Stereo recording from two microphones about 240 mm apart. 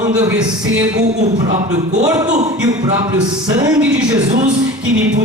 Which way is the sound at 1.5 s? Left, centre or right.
Right.